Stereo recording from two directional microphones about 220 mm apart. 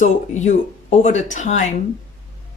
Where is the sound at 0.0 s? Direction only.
35° left (ahead or behind).